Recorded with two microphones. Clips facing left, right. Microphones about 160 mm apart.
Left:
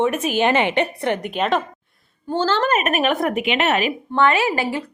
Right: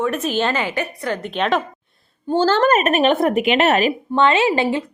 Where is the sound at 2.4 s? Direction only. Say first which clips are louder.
Right 4 dB; 45° right (ahead or behind).